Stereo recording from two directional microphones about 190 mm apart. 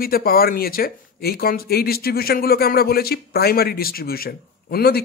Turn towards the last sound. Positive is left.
turn(degrees=55)  # may be behind; listen again after turning